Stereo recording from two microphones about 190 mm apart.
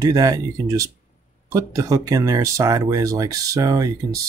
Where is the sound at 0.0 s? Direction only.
20° right (ahead or behind).